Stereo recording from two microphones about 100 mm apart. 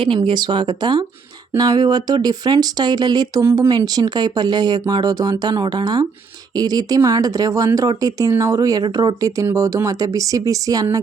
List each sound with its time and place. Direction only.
0.3 s speech: 50° right (ahead or behind)
3.4 s speech: 25° right (ahead or behind)
3.7 s speech: 40° right (ahead or behind)